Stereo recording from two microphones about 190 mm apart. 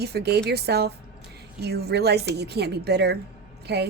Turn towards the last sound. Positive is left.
turn(degrees=-60)  # may be behind; listen again after turning